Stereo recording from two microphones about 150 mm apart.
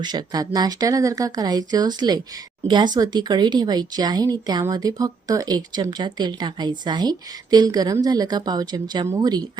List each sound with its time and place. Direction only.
0.0 s speech: 30° right (ahead or behind)